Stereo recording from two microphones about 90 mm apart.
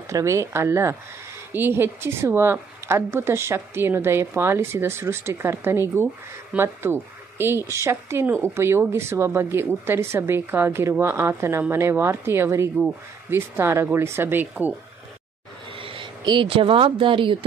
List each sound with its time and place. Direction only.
0.1 s a woman's voice: 35° right (ahead or behind)
15.7 s speech: 85° right